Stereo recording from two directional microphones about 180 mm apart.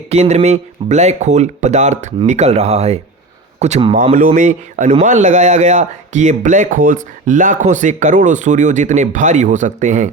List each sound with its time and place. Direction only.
0.1 s speech: 35° right (ahead or behind)
4.4 s speech: 45° right (ahead or behind)